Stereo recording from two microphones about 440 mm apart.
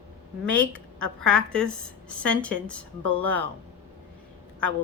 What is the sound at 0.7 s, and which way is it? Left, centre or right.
Speech, right.